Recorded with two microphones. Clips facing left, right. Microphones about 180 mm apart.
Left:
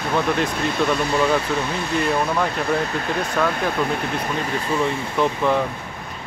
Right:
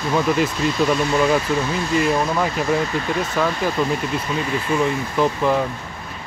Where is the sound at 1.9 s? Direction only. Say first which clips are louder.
Right 1 dB; centre (ahead or behind).